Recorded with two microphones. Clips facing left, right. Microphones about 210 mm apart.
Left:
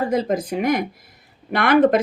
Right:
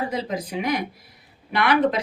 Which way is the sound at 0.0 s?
50° left (ahead or behind).